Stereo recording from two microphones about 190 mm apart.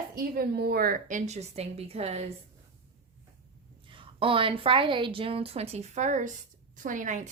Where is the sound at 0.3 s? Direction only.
55° right (ahead or behind); by 2.2 s 35° right (ahead or behind).